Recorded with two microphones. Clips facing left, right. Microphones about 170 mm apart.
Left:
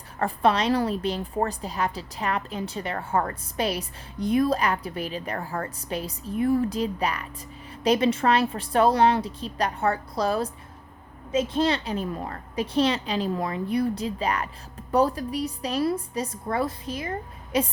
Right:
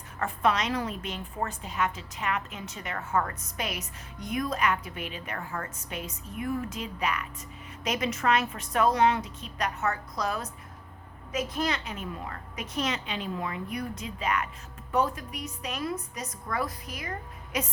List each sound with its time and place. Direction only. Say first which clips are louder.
0.2 s a woman's voice: left 5 dB; 35° left (ahead or behind)